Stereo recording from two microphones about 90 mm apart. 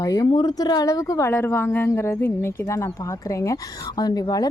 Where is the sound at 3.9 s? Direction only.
45° left (ahead or behind).